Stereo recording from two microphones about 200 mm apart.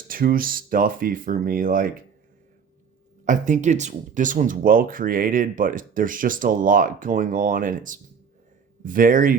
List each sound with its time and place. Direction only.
0.1 s speech: 45° right (ahead or behind)
3.2 s speech: 40° right (ahead or behind)